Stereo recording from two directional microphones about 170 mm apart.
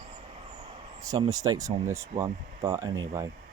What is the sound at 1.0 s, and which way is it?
Speech, 20° right (ahead or behind).